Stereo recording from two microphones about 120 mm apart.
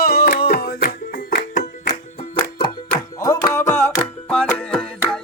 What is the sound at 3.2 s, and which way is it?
Music, 25° left (ahead or behind).